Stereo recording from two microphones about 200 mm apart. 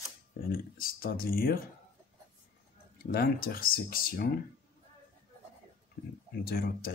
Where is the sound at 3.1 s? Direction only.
50° left (ahead or behind).